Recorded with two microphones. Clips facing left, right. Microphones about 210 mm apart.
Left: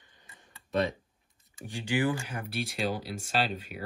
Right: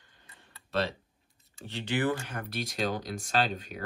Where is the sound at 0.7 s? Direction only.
20° left (ahead or behind).